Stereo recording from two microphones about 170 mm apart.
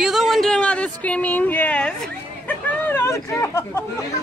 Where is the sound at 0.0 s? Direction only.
Centre (ahead or behind).